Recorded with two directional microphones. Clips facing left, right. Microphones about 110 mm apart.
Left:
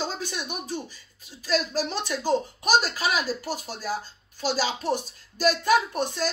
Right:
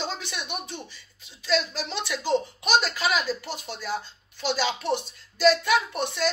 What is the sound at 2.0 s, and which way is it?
Speech, 45° left (ahead or behind).